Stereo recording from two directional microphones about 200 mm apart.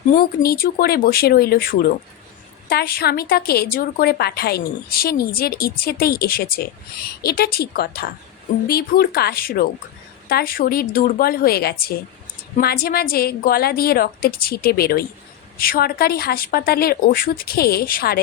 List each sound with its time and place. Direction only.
0.1 s a woman's voice: 45° left (ahead or behind)